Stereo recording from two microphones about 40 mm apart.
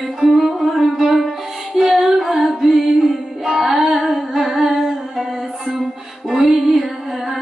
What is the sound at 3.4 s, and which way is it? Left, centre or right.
Music, centre.